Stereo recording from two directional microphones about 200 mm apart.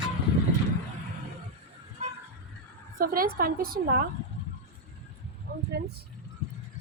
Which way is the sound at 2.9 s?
45° right (ahead or behind).